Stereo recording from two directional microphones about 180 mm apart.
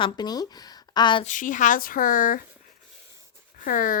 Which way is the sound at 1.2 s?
45° left (ahead or behind).